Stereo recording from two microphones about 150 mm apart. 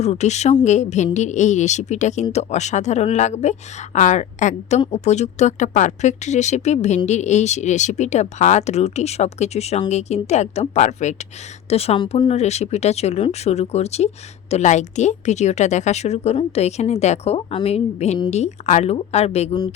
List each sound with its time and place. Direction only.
0.0 s speech: 50° left (ahead or behind)